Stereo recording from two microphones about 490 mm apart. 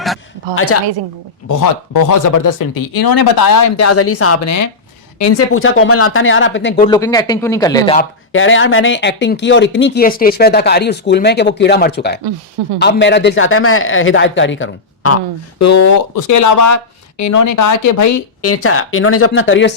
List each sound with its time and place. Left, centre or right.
0.5 s speech: left
1.5 s speech: left
6.8 s speech: centre
8.3 s speech: left